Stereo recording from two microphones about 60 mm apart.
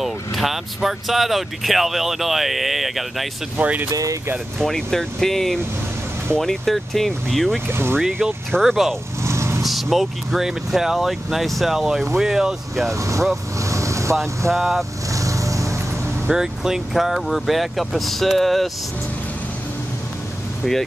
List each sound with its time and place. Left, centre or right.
0.0 s speech: centre
3.5 s speech: right
3.9 s speech: right
4.6 s speech: centre
7.6 s speech: right
8.6 s speech: centre
9.2 s vehicle: right
9.6 s speech: centre
12.9 s speech: right
13.6 s vehicle: right
14.5 s speech: centre
15.1 s vehicle: right
16.3 s speech: centre